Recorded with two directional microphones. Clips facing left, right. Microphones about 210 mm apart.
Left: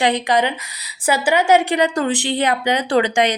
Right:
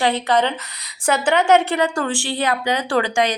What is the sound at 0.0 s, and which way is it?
A woman's voice, 15° left (ahead or behind).